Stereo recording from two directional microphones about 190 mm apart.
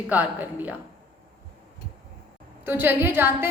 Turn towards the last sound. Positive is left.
turn(degrees=-10)  # may be behind; listen again after turning